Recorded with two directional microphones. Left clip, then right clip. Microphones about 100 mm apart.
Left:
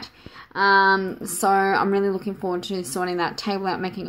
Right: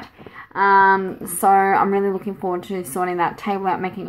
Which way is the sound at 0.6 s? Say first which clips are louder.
Right 3 dB; 45° left (ahead or behind).